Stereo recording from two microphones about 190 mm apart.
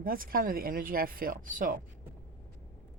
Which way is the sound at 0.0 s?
50° right (ahead or behind).